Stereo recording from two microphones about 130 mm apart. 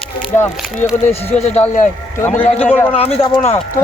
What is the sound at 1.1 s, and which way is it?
Speech, 55° left (ahead or behind).